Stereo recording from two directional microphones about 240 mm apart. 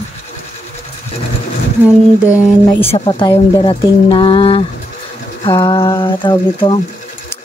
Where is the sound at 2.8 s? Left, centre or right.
Left.